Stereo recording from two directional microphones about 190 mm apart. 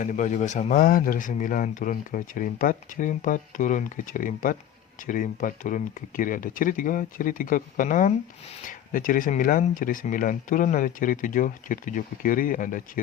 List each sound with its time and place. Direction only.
0.0 s speech: 40° left (ahead or behind)